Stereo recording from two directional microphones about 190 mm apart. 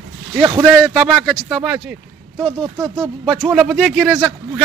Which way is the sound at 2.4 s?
25° right (ahead or behind).